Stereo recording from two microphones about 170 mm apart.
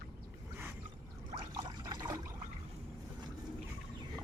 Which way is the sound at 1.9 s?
25° right (ahead or behind).